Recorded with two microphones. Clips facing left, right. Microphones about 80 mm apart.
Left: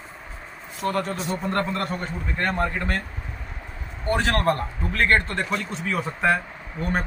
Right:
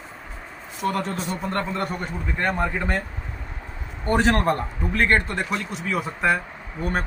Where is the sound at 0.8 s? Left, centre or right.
Right.